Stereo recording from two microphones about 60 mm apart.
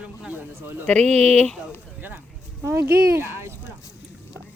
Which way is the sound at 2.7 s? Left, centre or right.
Right.